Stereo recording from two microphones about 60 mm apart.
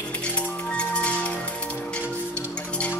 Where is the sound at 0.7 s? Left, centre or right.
Centre.